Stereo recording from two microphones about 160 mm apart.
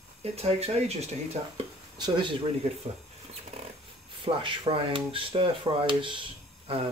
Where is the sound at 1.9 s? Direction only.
30° right (ahead or behind).